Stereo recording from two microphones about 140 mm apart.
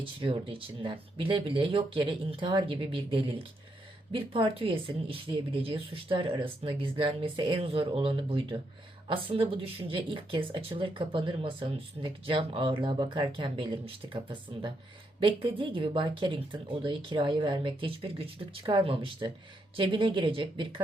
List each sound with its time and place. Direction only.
0.0 s speech: 40° right (ahead or behind)